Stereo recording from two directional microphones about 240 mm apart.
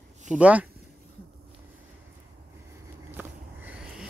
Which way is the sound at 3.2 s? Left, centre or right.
Centre.